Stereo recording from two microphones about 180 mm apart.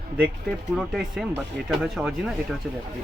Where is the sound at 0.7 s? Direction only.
5° right (ahead or behind).